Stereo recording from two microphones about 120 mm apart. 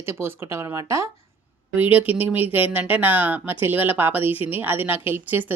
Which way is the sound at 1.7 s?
15° right (ahead or behind).